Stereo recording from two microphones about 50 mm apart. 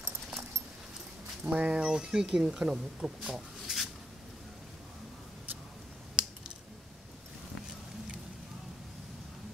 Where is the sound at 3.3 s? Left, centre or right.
Centre.